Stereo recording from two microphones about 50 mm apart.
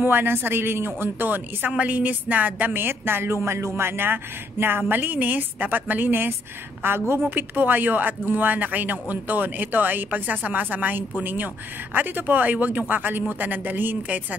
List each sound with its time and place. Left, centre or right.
0.0 s speech: right
2.8 s speech: right
7.2 s speech: right